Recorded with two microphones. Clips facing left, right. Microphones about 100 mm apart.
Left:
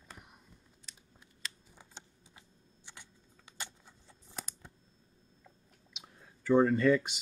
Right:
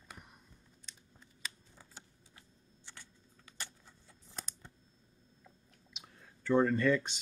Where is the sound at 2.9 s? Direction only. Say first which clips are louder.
Left 1 dB; 15° left (ahead or behind).